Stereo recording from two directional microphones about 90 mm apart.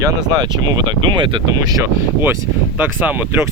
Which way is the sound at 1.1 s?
65° right (ahead or behind).